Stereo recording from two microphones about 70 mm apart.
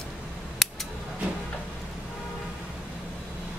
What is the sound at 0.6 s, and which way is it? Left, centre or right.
Scissors, centre.